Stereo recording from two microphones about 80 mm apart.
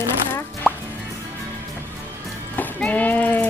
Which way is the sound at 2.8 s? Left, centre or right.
Centre.